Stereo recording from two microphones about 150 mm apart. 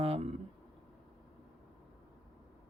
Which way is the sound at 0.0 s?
40° right (ahead or behind).